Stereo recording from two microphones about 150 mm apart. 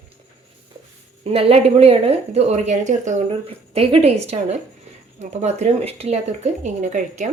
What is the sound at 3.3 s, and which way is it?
Speech, 40° right (ahead or behind).